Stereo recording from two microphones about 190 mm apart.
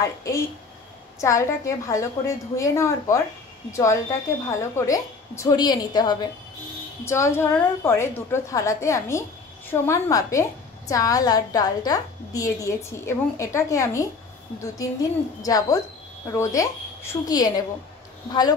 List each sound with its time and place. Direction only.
0.0 s a woman's voice: 15° left (ahead or behind)
15.4 s a woman's voice: 20° left (ahead or behind)